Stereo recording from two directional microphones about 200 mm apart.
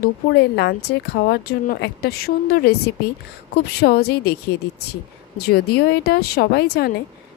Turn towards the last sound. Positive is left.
turn(degrees=55)  # may be behind; listen again after turning